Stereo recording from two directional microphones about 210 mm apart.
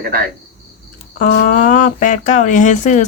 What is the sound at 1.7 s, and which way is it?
Speech, 40° left (ahead or behind).